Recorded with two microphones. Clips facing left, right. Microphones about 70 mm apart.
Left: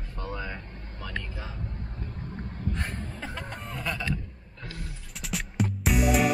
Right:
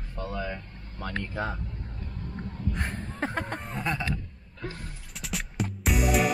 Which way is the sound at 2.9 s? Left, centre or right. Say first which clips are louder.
Right 4 dB; right.